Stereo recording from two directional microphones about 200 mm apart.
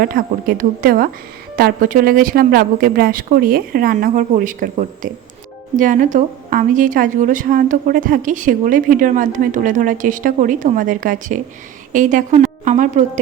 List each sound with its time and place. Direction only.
0.0 s a woman's voice: 45° right (ahead or behind)